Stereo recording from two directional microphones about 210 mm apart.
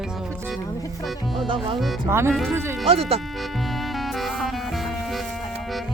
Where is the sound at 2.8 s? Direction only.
25° right (ahead or behind).